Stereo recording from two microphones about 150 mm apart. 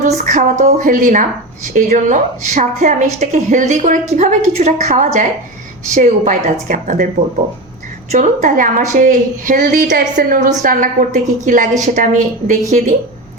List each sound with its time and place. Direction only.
0.0 s a woman's voice: 55° right (ahead or behind)
8.1 s a woman's voice: 55° right (ahead or behind)